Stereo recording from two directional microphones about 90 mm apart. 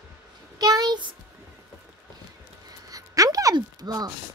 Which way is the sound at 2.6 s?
40° right (ahead or behind).